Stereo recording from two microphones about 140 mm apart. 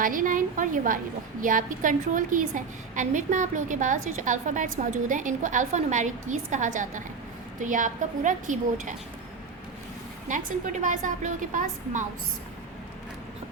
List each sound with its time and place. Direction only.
0.0 s a woman's voice: 75° right (ahead or behind)
10.2 s a woman's voice: 65° right (ahead or behind)